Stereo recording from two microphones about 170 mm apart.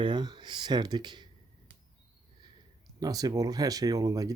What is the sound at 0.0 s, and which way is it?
Speech, 25° right (ahead or behind).